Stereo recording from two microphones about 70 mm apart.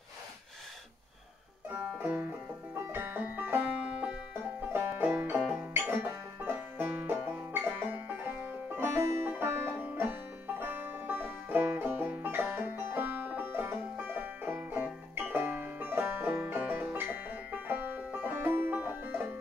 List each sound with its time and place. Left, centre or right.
2.0 s music: right